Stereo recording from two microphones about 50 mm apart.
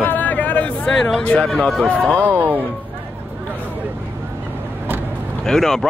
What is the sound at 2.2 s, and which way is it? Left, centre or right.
Speech, right.